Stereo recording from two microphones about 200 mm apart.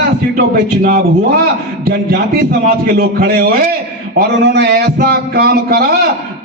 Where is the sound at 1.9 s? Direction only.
50° right (ahead or behind).